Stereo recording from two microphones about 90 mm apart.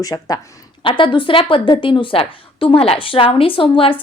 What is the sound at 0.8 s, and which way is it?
A woman's voice, 70° left (ahead or behind).